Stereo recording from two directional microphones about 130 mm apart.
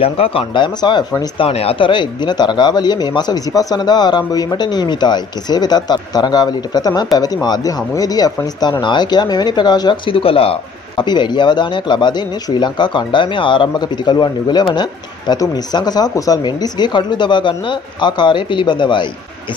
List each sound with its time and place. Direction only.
0.0 s speech: 45° left (ahead or behind)
1.4 s speech: 50° left (ahead or behind)